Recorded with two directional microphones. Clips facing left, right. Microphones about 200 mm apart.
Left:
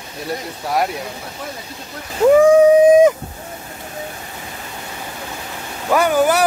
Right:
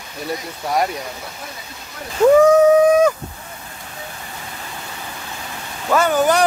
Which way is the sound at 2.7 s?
15° left (ahead or behind).